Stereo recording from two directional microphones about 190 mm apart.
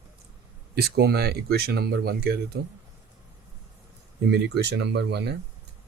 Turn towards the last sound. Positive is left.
turn(degrees=-60)  # may be behind; listen again after turning